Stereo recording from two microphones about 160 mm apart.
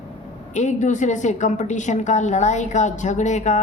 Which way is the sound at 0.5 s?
50° left (ahead or behind).